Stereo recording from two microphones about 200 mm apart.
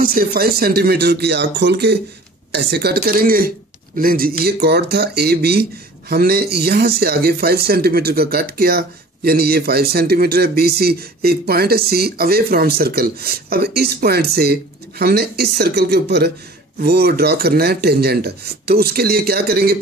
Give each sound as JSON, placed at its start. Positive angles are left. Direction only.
{"t": 0.0, "sound": "speech", "side_deg": -45}